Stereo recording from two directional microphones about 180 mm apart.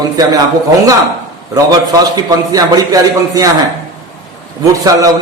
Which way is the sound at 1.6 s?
20° right (ahead or behind).